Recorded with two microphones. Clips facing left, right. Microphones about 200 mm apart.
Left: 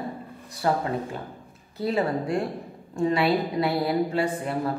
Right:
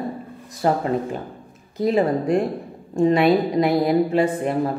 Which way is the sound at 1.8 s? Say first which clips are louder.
Right 6 dB; 15° right (ahead or behind).